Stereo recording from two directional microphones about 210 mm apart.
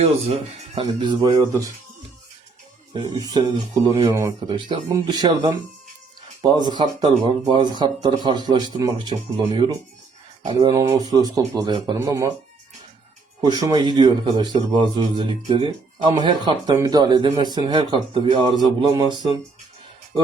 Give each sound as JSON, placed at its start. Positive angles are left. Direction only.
{"t": 0.8, "sound": "speech", "side_deg": -25}
{"t": 3.2, "sound": "speech", "side_deg": -20}
{"t": 13.4, "sound": "speech", "side_deg": -20}